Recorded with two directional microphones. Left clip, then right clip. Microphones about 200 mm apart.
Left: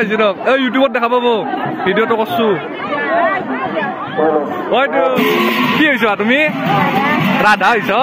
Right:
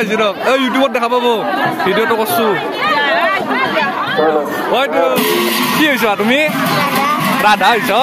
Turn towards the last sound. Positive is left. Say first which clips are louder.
# right 1 dB
turn(degrees=-15)  # may be behind; listen again after turning